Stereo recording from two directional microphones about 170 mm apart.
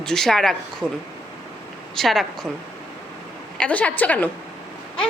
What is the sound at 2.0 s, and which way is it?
Speech, centre (ahead or behind).